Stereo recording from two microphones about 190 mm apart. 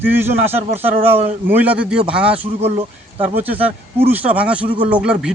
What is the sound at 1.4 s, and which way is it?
Speech, 10° right (ahead or behind).